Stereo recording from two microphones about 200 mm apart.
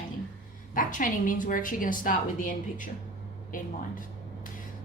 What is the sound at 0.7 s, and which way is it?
A woman's voice, 40° left (ahead or behind).